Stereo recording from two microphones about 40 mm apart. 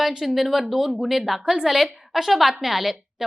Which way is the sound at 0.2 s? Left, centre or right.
Centre.